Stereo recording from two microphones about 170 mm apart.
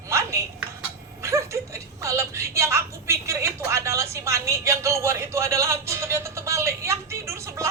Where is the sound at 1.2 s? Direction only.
15° right (ahead or behind).